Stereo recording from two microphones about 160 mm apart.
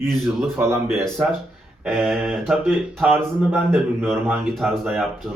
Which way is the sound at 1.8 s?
5° right (ahead or behind).